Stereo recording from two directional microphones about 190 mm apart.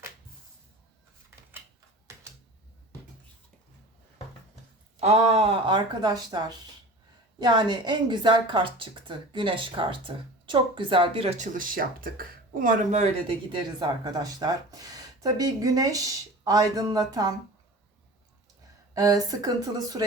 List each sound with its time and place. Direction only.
2.1 s typewriter: 15° right (ahead or behind)
4.9 s a woman's voice: 35° right (ahead or behind)
18.9 s a woman's voice: 20° right (ahead or behind)